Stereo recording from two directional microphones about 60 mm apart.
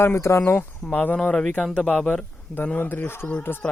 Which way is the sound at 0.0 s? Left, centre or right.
Left.